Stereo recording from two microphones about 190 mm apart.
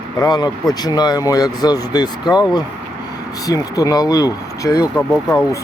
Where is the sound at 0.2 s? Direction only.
20° left (ahead or behind).